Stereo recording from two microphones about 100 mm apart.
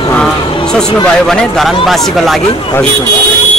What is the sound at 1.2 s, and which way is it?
Speech, centre (ahead or behind).